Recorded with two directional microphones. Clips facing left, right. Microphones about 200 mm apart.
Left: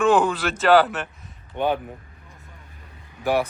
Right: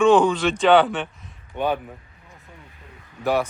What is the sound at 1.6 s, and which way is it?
Speech, 20° left (ahead or behind).